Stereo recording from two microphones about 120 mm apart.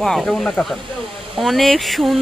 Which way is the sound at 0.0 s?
5° left (ahead or behind).